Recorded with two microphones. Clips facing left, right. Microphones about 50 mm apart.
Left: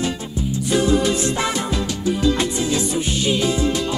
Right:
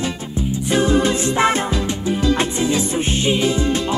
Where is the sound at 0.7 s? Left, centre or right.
Right.